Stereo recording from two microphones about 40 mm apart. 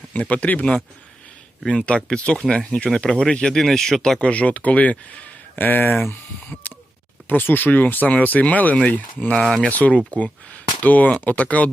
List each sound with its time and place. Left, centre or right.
0.1 s speech: left
1.8 s speech: left
3.4 s speech: centre
4.2 s speech: left
6.5 s a sound: left
7.3 s speech: left
8.0 s speech: left
9.3 s speech: left
9.6 s speech: left
10.5 s a sound: left
11.3 s speech: left